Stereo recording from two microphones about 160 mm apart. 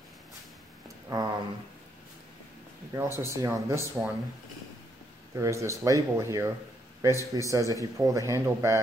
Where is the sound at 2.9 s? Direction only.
15° right (ahead or behind).